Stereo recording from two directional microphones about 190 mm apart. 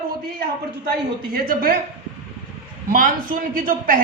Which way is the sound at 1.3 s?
50° right (ahead or behind).